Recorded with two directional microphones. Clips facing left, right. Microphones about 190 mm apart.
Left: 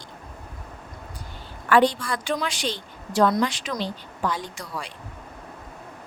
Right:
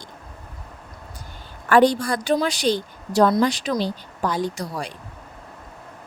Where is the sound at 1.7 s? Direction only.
40° right (ahead or behind).